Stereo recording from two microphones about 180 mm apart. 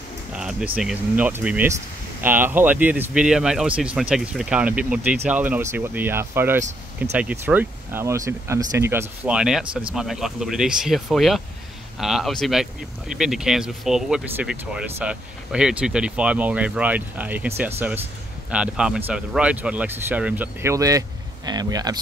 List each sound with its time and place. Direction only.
0.3 s speech: 5° right (ahead or behind); by 21.9 s 20° right (ahead or behind)